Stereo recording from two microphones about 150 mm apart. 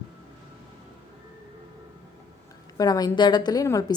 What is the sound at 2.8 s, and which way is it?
A woman's voice, 25° left (ahead or behind).